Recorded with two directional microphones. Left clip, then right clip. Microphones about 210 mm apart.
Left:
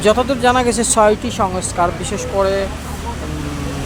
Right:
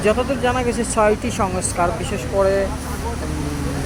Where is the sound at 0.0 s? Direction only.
15° left (ahead or behind).